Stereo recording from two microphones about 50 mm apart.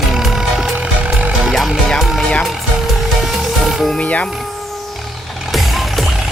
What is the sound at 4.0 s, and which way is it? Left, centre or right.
Speech, left.